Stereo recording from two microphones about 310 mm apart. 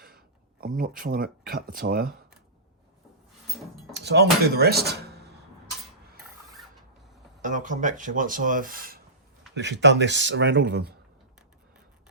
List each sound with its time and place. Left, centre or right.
0.6 s speech: right
3.9 s speech: right
7.4 s speech: right